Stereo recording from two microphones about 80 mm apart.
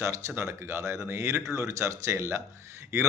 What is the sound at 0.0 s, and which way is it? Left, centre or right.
Speech, right.